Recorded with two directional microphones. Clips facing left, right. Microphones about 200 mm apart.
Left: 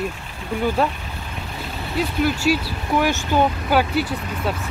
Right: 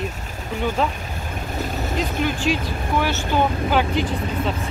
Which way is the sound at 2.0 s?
5° left (ahead or behind).